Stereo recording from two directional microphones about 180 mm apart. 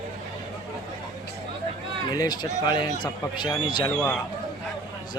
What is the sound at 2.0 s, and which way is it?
A man's voice, 20° left (ahead or behind).